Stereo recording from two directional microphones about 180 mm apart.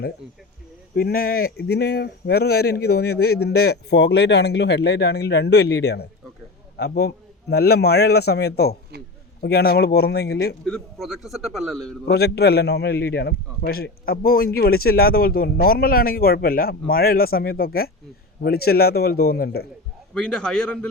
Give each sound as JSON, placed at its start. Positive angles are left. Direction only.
{"t": 0.9, "sound": "a man's voice", "side_deg": 55}
{"t": 10.7, "sound": "a man's voice", "side_deg": 0}
{"t": 12.0, "sound": "speech", "side_deg": 65}
{"t": 20.1, "sound": "a man's voice", "side_deg": 5}